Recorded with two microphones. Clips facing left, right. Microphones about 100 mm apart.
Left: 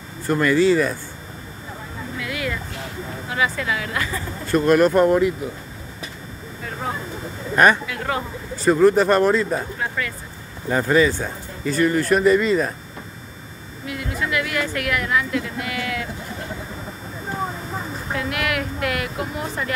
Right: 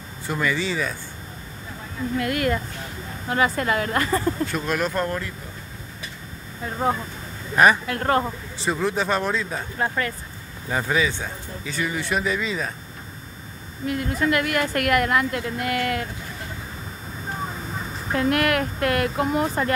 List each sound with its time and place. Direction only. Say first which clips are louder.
0.3 s speech: left 8 dB; centre (ahead or behind)
2.1 s a woman's voice: right 5 dB; 50° right (ahead or behind)
4.5 s speech: left 9 dB; 5° left (ahead or behind)
7.5 s speech: left 1 dB; 5° right (ahead or behind)
7.8 s a woman's voice: right 3 dB; 45° right (ahead or behind)
8.6 s speech: left 9 dB; 5° left (ahead or behind)
9.8 s speech: right 2 dB; 40° right (ahead or behind)
10.7 s speech: left 6 dB; 5° right (ahead or behind)
13.8 s a woman's voice: right 4 dB; 45° right (ahead or behind)
18.1 s a woman's voice: right 4 dB; 45° right (ahead or behind)